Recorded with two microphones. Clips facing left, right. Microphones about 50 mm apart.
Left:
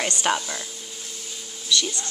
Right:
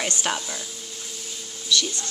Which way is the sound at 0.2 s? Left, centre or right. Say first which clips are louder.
Left 4 dB; centre.